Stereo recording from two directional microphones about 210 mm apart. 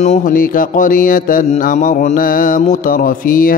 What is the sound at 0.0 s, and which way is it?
Mantra, 35° left (ahead or behind).